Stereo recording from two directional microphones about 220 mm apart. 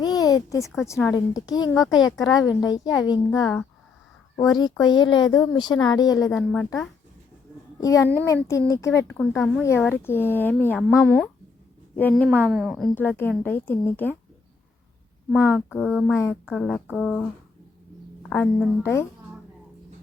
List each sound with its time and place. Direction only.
0.0 s a sound: 15° left (ahead or behind)
0.9 s speech: 10° left (ahead or behind)
1.7 s speech: centre (ahead or behind)
2.0 s speech: 15° left (ahead or behind)
3.2 s speech: centre (ahead or behind)
4.4 s speech: 20° left (ahead or behind)
12.3 s speech: 5° right (ahead or behind)
15.4 s speech: centre (ahead or behind)